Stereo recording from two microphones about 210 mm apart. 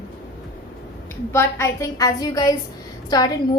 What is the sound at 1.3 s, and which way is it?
A woman's voice, 10° left (ahead or behind).